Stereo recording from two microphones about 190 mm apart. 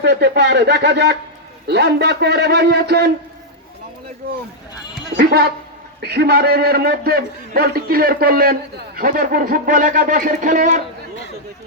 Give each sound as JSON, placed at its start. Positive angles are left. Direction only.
{"t": 0.0, "sound": "a man's voice", "side_deg": -60}
{"t": 5.1, "sound": "a man's voice", "side_deg": -60}